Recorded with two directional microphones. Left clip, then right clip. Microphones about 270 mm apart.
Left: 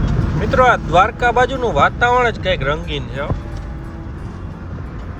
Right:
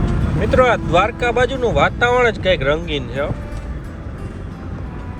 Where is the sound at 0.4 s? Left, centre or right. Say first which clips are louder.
Left 1 dB; centre.